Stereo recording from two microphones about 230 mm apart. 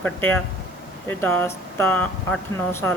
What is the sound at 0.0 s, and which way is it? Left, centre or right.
Speech, centre.